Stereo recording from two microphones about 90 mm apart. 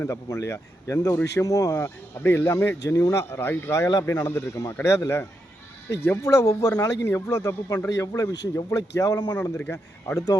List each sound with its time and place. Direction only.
0.0 s speech: 35° left (ahead or behind)
1.8 s speech: 30° left (ahead or behind); by 9.3 s 45° left (ahead or behind)
9.3 s speech: 20° left (ahead or behind)